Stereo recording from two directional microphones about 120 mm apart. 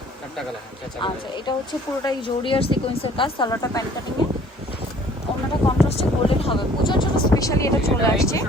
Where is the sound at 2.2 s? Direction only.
45° left (ahead or behind).